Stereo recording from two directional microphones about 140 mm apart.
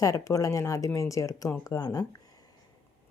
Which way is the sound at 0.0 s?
25° left (ahead or behind).